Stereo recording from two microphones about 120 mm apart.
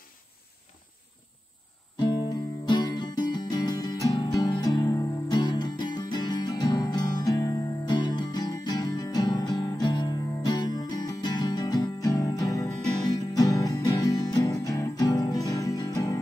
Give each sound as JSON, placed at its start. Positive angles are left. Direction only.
{"t": 2.0, "sound": "music", "side_deg": 40}